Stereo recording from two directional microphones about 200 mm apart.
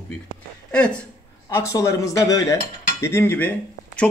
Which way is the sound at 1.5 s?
15° left (ahead or behind).